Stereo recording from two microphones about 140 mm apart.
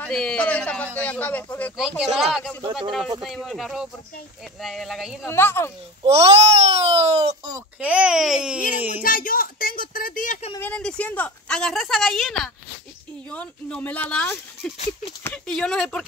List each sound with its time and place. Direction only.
0.0 s a woman's voice: 5° left (ahead or behind)
1.8 s a child's voice: 5° right (ahead or behind)
5.2 s a woman's voice: 15° left (ahead or behind)
6.0 s a child's voice: 50° right (ahead or behind)
7.8 s a child's voice: 10° right (ahead or behind)
9.0 s speech: 80° left
10.6 s a woman's voice: 10° left (ahead or behind)